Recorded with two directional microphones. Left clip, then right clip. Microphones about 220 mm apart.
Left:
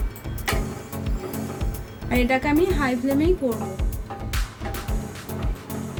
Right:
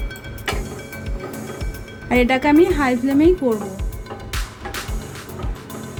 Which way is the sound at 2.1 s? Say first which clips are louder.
Right 6 dB; 45° right (ahead or behind).